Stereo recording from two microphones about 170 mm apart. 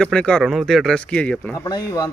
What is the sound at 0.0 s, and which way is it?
A man's voice, 5° left (ahead or behind).